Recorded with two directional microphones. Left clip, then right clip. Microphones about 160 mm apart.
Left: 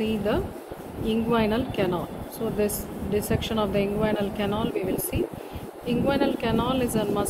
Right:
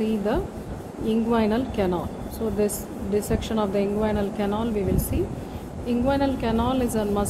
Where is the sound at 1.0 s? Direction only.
45° right (ahead or behind).